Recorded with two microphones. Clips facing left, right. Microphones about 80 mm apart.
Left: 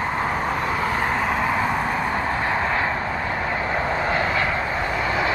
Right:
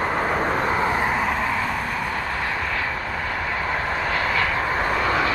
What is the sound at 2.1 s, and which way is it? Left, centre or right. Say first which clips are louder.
Vehicle: left 3 dB; left.